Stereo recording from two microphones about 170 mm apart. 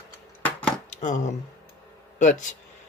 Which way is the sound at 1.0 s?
45° left (ahead or behind).